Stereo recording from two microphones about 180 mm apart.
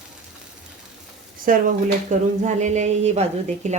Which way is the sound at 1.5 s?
50° right (ahead or behind).